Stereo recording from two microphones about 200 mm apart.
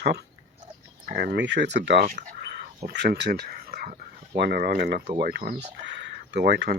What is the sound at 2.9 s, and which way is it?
Speech, 55° right (ahead or behind).